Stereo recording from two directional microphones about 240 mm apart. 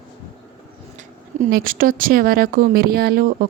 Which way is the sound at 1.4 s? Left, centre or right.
Right.